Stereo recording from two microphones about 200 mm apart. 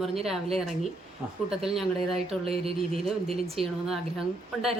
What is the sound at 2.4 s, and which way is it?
Speech, 30° right (ahead or behind).